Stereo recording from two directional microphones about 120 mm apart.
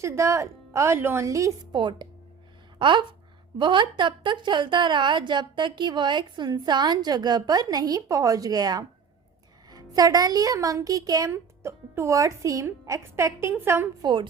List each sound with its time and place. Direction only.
0.0 s a woman's voice: 25° right (ahead or behind)
1.7 s a woman's voice: 40° right (ahead or behind); by 13.8 s 20° right (ahead or behind)
14.0 s a woman's voice: 40° right (ahead or behind)